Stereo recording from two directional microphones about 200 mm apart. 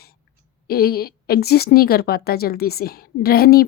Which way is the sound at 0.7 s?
50° left (ahead or behind).